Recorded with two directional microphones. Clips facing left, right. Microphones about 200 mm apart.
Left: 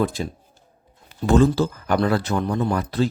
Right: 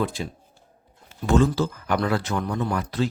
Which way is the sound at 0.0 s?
40° left (ahead or behind).